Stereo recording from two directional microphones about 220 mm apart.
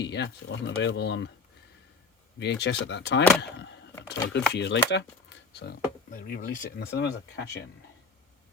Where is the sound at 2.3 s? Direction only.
50° left (ahead or behind).